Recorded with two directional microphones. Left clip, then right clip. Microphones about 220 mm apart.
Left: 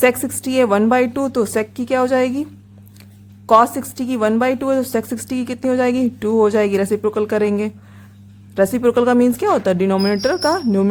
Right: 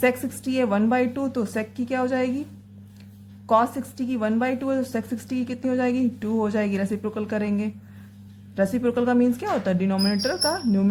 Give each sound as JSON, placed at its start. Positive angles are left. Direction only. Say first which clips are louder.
{"t": 0.0, "sound": "a woman's voice", "louder": "left 7 dB", "side_deg": 30}
{"t": 3.4, "sound": "a woman's voice", "louder": "left 8 dB", "side_deg": 30}